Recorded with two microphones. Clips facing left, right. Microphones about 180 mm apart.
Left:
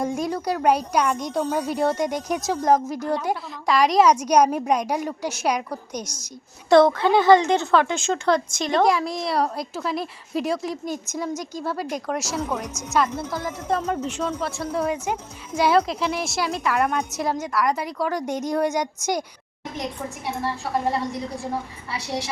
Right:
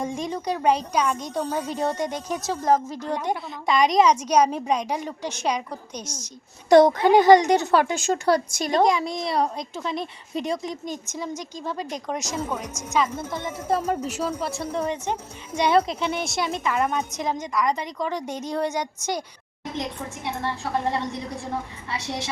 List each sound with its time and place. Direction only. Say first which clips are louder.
0.0 s a woman's voice: left 3 dB; 5° left (ahead or behind)
6.7 s a woman's voice: right 1 dB; 15° right (ahead or behind)
7.5 s speech: even; 40° right (ahead or behind)
7.8 s a woman's voice: even; 10° right (ahead or behind)
8.8 s a woman's voice: even; centre (ahead or behind)
12.5 s a woman's voice: left 1 dB; 10° right (ahead or behind)
14.7 s a woman's voice: left 3 dB; 10° left (ahead or behind)
21.8 s a woman's voice: left 3 dB; 25° right (ahead or behind)